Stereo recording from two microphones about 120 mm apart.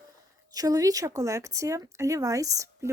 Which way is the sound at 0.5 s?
30° right (ahead or behind).